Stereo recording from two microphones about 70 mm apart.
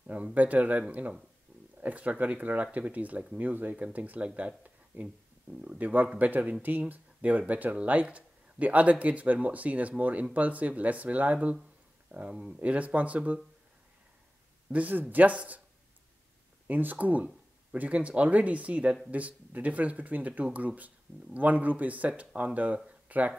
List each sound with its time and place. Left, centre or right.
0.0 s speech: centre
14.7 s speech: right
16.6 s speech: right
22.8 s a sound: right